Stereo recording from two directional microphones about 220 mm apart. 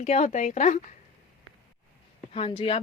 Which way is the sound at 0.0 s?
30° left (ahead or behind).